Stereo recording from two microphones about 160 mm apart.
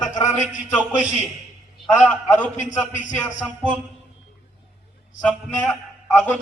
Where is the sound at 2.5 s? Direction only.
50° left (ahead or behind).